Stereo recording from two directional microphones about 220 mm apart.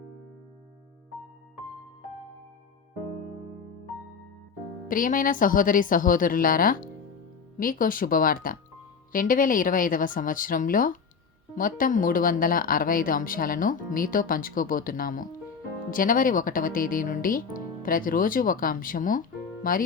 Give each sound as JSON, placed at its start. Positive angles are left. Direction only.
{"t": 4.9, "sound": "speech", "side_deg": 40}